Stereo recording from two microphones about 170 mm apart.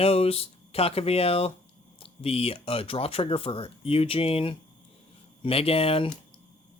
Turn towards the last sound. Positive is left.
turn(degrees=35)  # may be behind; listen again after turning